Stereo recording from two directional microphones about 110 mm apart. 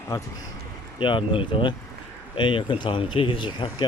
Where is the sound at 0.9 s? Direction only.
50° left (ahead or behind).